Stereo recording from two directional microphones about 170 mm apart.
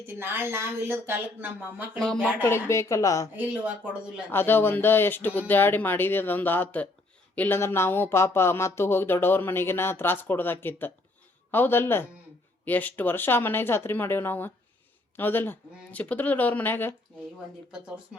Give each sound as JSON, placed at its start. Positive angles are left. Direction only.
{"t": 0.0, "sound": "speech", "side_deg": -15}
{"t": 2.0, "sound": "speech", "side_deg": 5}
{"t": 3.3, "sound": "speech", "side_deg": -10}
{"t": 4.3, "sound": "speech", "side_deg": 15}
{"t": 17.7, "sound": "speech", "side_deg": -5}